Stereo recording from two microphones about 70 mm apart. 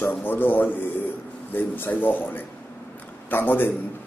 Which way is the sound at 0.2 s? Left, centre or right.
Left.